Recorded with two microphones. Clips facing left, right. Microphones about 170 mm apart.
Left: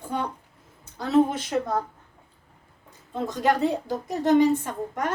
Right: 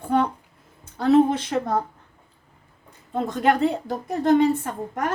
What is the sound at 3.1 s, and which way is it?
A woman's voice, 55° right (ahead or behind).